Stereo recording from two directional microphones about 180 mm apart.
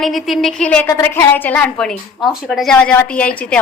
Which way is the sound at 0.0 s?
Centre (ahead or behind).